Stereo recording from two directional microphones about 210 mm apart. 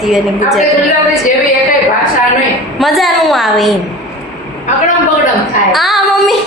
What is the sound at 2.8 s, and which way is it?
Speech, centre (ahead or behind).